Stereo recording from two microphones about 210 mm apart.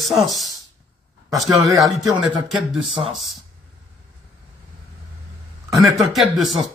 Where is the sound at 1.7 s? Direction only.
Centre (ahead or behind).